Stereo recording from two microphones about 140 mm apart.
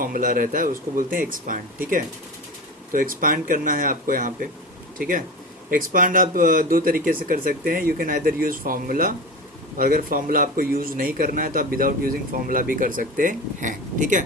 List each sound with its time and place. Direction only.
0.0 s speech: 80° right
2.9 s a man's voice: 80° right